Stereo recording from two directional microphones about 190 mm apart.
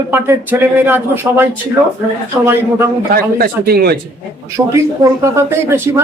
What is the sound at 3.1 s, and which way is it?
Speech, 50° right (ahead or behind).